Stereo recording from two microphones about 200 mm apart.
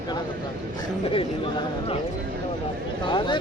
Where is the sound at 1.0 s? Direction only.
25° left (ahead or behind).